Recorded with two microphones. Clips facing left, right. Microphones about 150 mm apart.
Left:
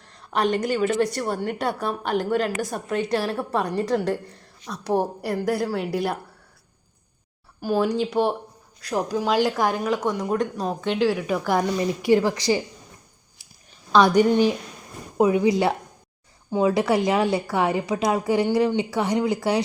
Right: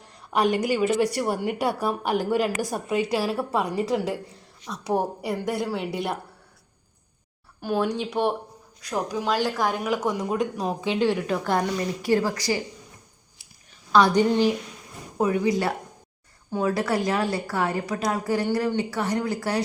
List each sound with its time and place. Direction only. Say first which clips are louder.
0.0 s a woman's voice: right 1 dB; 10° right (ahead or behind)
7.6 s speech: left 3 dB; 5° left (ahead or behind)
9.7 s speech: left 1 dB; 5° right (ahead or behind)
11.8 s a woman's voice: left 4 dB; 20° left (ahead or behind)
13.9 s a woman's voice: left 2 dB; 15° left (ahead or behind)